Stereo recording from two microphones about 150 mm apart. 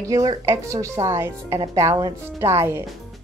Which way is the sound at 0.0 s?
25° right (ahead or behind).